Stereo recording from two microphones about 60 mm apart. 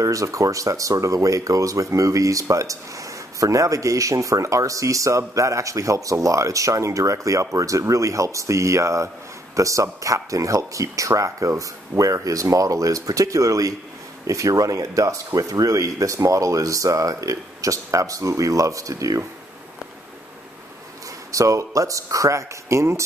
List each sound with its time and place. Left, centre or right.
0.0 s speech: right
21.3 s speech: right